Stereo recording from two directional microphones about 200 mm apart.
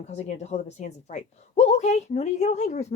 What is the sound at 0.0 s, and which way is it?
A woman's voice, 35° left (ahead or behind).